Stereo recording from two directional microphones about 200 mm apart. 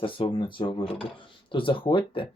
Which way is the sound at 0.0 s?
25° left (ahead or behind).